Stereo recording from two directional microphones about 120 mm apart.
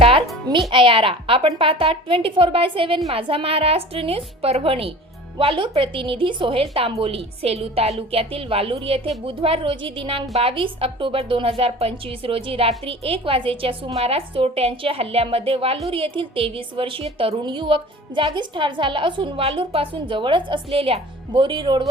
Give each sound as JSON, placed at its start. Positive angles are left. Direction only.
{"t": 0.0, "sound": "music", "side_deg": -50}
{"t": 0.7, "sound": "a woman's voice", "side_deg": -45}